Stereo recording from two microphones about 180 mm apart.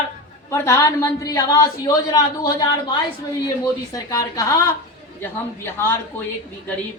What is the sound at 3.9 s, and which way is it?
Speech, 20° left (ahead or behind).